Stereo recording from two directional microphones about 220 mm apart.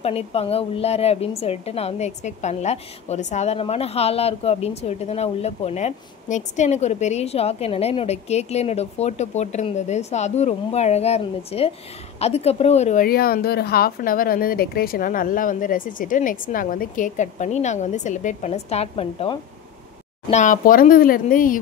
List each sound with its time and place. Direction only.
0.0 s a woman's voice: 25° left (ahead or behind)